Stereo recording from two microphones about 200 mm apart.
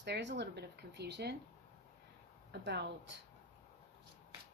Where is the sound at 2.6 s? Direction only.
60° right (ahead or behind).